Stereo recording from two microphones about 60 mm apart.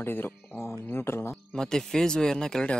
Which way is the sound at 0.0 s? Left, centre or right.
Left.